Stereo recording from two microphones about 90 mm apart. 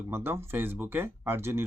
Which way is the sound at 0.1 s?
25° right (ahead or behind).